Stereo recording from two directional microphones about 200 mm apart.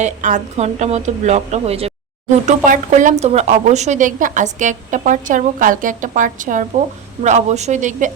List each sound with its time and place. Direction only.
0.0 s a woman's voice: 40° right (ahead or behind)